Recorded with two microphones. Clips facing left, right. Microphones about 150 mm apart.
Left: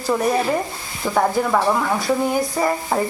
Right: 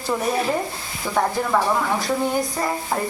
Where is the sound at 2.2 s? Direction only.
5° left (ahead or behind).